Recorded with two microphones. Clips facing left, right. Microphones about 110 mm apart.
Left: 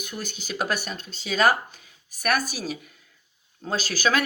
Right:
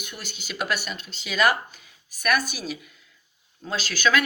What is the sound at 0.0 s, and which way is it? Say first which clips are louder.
Speech: left 5 dB; 40° left (ahead or behind).